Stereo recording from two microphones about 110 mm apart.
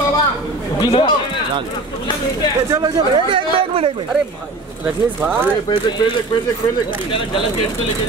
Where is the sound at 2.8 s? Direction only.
50° right (ahead or behind).